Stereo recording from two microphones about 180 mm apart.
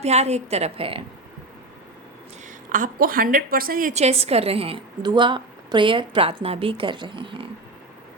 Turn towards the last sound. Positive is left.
turn(degrees=-30)  # may be behind; listen again after turning